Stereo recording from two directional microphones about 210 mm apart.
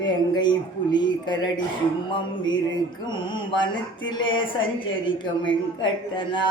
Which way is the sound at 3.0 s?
20° left (ahead or behind).